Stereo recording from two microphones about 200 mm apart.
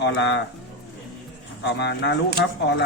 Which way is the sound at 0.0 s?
60° left (ahead or behind).